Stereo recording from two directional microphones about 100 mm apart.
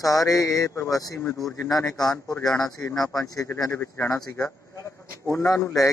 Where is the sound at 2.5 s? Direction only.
35° left (ahead or behind).